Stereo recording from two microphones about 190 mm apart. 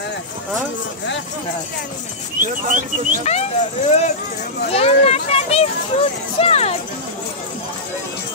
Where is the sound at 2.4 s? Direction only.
45° right (ahead or behind).